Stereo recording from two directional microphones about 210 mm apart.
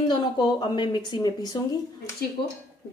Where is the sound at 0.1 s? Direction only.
20° left (ahead or behind).